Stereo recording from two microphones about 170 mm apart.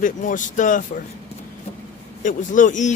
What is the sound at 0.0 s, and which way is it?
Speech, 50° left (ahead or behind).